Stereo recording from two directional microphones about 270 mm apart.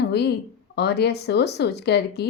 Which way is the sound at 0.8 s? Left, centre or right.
Left.